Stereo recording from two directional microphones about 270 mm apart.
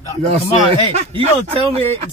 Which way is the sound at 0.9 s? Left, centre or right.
Right.